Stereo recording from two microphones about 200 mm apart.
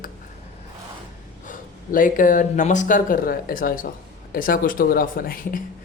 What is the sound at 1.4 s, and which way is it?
Speech, 40° left (ahead or behind).